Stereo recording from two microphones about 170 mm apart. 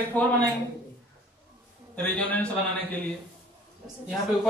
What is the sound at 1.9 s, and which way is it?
Speech, 10° left (ahead or behind).